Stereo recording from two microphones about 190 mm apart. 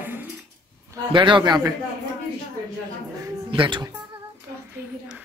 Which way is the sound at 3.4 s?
25° right (ahead or behind).